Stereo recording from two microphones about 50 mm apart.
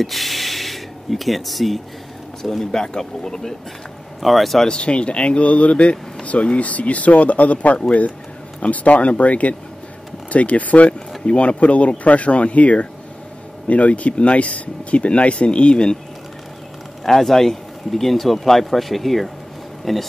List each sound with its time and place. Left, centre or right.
0.0 s a sound: centre
2.4 s speech: centre
4.6 s speech: left
17.0 s speech: centre